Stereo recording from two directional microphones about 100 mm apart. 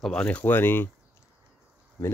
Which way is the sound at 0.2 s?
15° left (ahead or behind).